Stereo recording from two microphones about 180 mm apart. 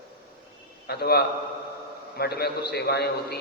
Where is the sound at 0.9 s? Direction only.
60° left (ahead or behind).